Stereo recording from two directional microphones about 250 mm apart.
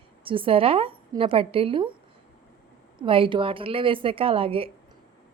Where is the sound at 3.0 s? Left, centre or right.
Right.